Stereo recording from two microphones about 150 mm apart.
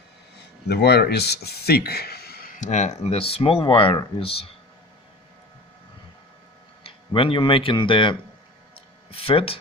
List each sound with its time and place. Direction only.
0.7 s speech: 90° left
2.6 s speech: 50° left (ahead or behind)
6.8 s speech: 35° left (ahead or behind)
8.7 s a sound: 40° left (ahead or behind)